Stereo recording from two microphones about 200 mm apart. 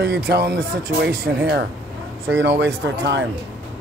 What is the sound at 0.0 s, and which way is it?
Speech, 55° right (ahead or behind).